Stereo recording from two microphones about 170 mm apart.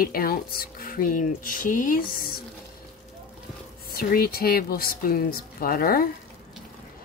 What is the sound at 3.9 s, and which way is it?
Speech, 60° left (ahead or behind).